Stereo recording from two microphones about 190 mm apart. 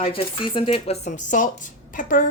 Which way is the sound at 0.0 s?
30° left (ahead or behind).